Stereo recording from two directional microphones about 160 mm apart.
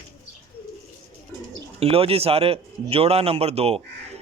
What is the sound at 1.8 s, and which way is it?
A man's voice, 35° right (ahead or behind).